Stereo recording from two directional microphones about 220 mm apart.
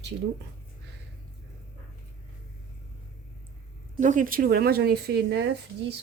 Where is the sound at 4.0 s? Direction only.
35° right (ahead or behind); by 5.5 s 50° right (ahead or behind).